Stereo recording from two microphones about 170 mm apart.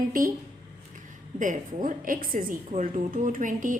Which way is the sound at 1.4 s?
50° right (ahead or behind).